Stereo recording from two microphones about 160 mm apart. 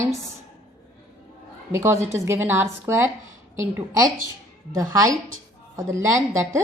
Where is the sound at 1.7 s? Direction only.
15° right (ahead or behind).